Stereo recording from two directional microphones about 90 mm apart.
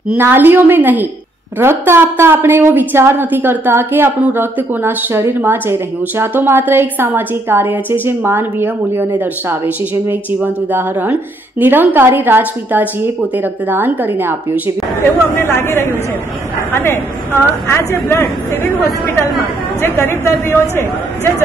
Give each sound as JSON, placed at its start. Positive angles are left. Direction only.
{"t": 0.2, "sound": "a woman's voice", "side_deg": -25}
{"t": 15.3, "sound": "speech", "side_deg": 25}
{"t": 19.8, "sound": "speech", "side_deg": 25}